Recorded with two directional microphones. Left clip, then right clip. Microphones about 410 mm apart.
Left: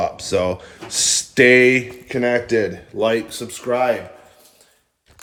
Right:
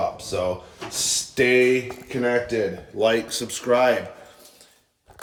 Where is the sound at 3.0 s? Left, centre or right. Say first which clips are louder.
Left 2 dB; centre.